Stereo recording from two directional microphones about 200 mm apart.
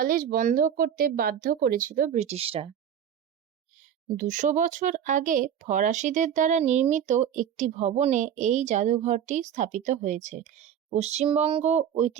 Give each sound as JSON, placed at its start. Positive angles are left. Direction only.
{"t": 0.0, "sound": "speech", "side_deg": -45}
{"t": 4.2, "sound": "a woman's voice", "side_deg": -40}